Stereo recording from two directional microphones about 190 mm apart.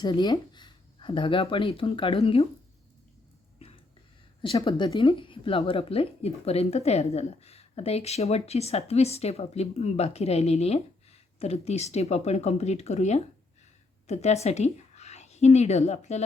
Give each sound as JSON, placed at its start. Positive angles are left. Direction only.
{"t": 0.0, "sound": "speech", "side_deg": 25}
{"t": 3.6, "sound": "whispering", "side_deg": 30}
{"t": 4.4, "sound": "a woman's voice", "side_deg": 25}